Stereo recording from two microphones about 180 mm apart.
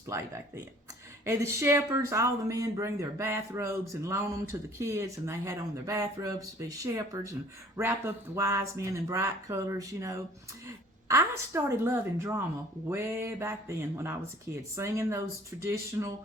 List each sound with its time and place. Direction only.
0.1 s speech: 15° right (ahead or behind)